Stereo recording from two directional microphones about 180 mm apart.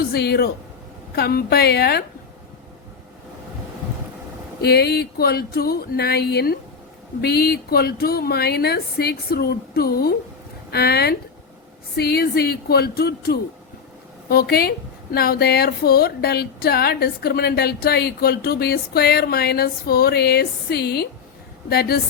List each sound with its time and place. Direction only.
0.1 s speech: 60° left (ahead or behind)
4.6 s speech: 65° left (ahead or behind)